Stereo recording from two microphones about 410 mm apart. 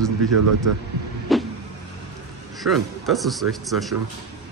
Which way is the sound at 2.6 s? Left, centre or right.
Centre.